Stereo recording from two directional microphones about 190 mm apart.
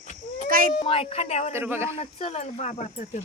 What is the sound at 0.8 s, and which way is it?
Speech, 30° left (ahead or behind).